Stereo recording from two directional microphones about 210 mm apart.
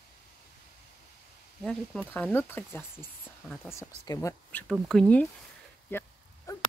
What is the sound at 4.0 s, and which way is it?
Speech, 15° left (ahead or behind).